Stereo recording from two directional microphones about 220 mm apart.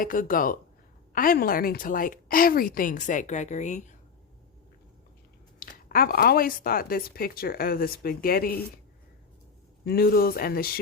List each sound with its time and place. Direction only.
0.0 s a woman's voice: 40° left (ahead or behind)
5.5 s speech: 40° left (ahead or behind)
9.8 s a woman's voice: 45° left (ahead or behind)